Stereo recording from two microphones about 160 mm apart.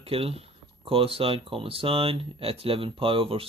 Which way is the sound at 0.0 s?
35° right (ahead or behind).